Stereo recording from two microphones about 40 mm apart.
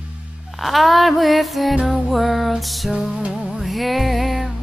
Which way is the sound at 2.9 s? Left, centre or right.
Centre.